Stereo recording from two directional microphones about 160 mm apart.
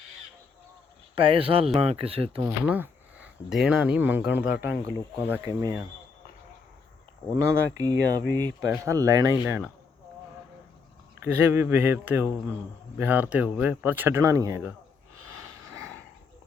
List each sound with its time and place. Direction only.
1.1 s speech: 35° right (ahead or behind)
2.4 s speech: 10° right (ahead or behind)
5.3 s speech: 20° right (ahead or behind)
7.3 s speech: 20° right (ahead or behind)
11.2 s speech: 15° right (ahead or behind)